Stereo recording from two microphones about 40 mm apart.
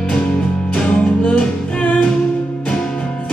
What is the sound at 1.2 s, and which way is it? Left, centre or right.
Music, left.